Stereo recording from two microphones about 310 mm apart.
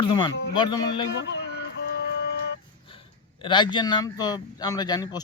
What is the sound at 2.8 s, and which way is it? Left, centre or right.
A man's voice, centre.